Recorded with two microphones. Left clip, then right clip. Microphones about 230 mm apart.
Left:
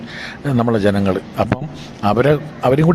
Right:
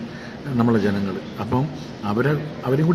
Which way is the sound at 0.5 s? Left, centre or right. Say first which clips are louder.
Left 5 dB; left.